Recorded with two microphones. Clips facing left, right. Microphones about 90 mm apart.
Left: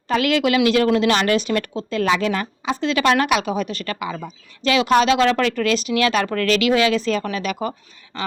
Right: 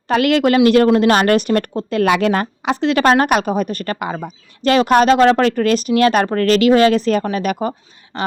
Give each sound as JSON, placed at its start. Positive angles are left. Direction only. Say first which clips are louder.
{"t": 0.1, "sound": "speech", "louder": "right 4 dB", "side_deg": -55}